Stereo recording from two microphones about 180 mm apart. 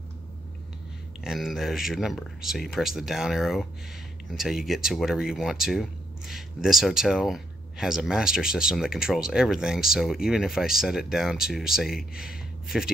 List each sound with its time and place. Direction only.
1.2 s speech: centre (ahead or behind)